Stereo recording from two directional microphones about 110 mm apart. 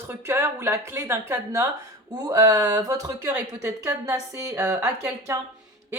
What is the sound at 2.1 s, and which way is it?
Speech, 35° right (ahead or behind).